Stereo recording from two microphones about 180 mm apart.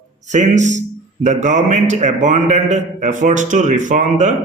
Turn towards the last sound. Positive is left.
turn(degrees=-40)  # may be behind; listen again after turning